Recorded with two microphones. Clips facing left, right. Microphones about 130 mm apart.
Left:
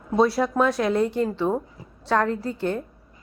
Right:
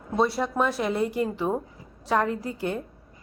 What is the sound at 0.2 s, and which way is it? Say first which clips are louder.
A woman's voice: left 4 dB; centre (ahead or behind).